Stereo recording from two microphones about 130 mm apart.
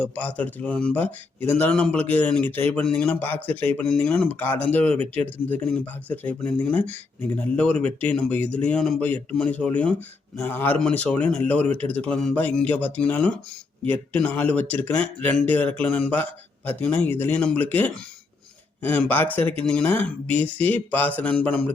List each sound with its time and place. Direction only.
0.0 s speech: 10° left (ahead or behind)